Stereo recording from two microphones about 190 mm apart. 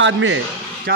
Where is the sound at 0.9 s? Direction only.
55° right (ahead or behind).